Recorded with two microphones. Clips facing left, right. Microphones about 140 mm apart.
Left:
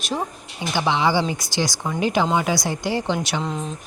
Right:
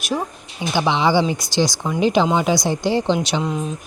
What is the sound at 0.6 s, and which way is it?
Speech, 15° right (ahead or behind).